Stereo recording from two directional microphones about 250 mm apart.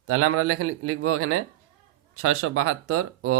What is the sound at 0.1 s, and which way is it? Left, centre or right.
Speech, right.